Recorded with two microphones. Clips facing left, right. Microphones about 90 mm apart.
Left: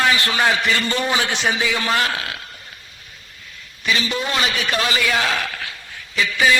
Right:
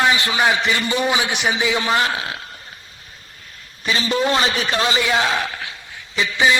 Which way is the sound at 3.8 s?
35° right (ahead or behind).